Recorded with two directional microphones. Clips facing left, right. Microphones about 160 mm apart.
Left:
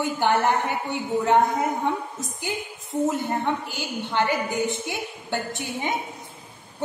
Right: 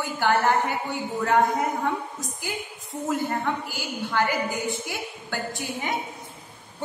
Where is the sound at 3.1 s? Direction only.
20° left (ahead or behind).